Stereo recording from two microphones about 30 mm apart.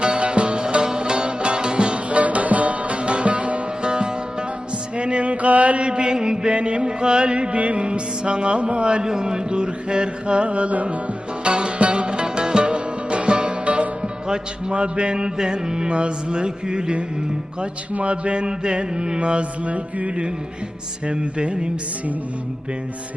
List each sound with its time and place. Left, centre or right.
0.0 s music: right
2.0 s music: right
3.8 s music: right
4.9 s mantra: right
5.8 s music: right
7.5 s music: right
11.4 s music: right
13.7 s music: right
15.9 s music: right
17.9 s music: right
21.1 s music: right